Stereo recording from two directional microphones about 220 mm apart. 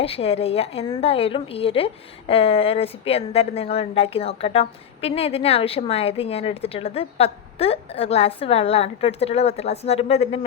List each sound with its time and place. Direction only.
0.0 s a woman's voice: 25° left (ahead or behind)